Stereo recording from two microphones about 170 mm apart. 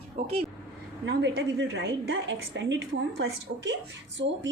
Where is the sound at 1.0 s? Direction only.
85° right.